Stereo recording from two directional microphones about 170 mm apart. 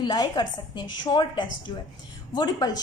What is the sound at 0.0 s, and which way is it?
A woman's voice, 25° left (ahead or behind).